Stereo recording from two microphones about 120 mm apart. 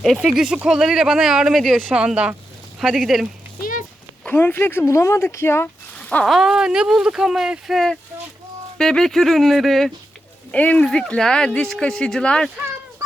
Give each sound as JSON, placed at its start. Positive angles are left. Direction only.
{"t": 0.0, "sound": "speech", "side_deg": 0}
{"t": 4.3, "sound": "speech", "side_deg": 15}
{"t": 6.0, "sound": "a sound", "side_deg": 10}
{"t": 6.3, "sound": "speech", "side_deg": -5}
{"t": 10.5, "sound": "speech", "side_deg": 10}